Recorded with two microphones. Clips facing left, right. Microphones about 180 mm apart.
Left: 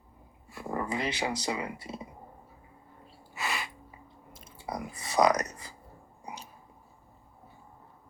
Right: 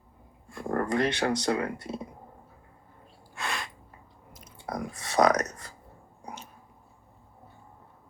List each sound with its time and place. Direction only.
0.4 s a sound: 5° left (ahead or behind)
1.2 s speech: 5° left (ahead or behind)
3.3 s a sound: 5° left (ahead or behind)
4.3 s chewing: 25° left (ahead or behind)
4.5 s chewing: 5° left (ahead or behind)
5.1 s speech: 5° left (ahead or behind)